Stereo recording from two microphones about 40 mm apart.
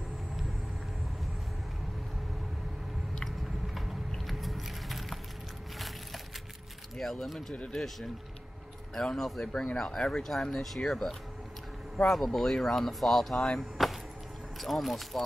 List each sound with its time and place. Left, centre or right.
3.4 s a sound: centre
4.3 s vehicle: centre
5.8 s a sound: centre
7.0 s speech: centre
9.8 s speech: centre
13.6 s vehicle: centre
14.6 s speech: centre